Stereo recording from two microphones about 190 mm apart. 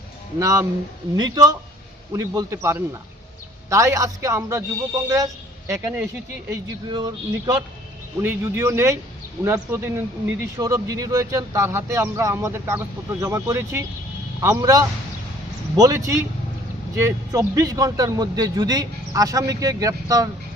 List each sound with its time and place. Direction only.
0.3 s a man's voice: 15° right (ahead or behind)
6.5 s a man's voice: 20° right (ahead or behind)